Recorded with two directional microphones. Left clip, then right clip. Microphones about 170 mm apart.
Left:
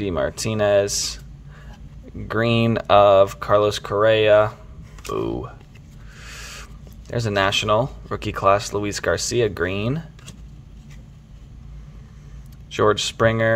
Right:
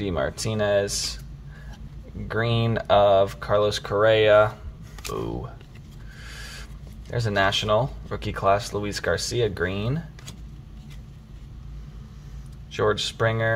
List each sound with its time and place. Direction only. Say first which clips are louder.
0.0 s speech: left 3 dB; 30° left (ahead or behind)
2.2 s speech: left 5 dB; 40° left (ahead or behind)
5.1 s speech: left 6 dB; 35° left (ahead or behind)
12.7 s speech: left 5 dB; 40° left (ahead or behind)